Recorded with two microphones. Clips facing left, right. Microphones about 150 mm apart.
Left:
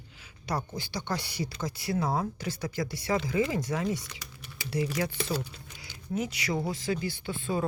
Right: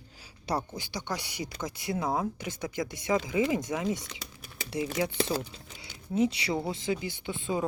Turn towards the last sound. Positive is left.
turn(degrees=-20)  # may be behind; listen again after turning